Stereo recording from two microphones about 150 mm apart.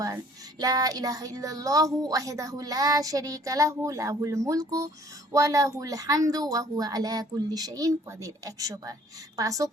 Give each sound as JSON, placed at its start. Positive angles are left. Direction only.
{"t": 0.6, "sound": "a woman's voice", "side_deg": -25}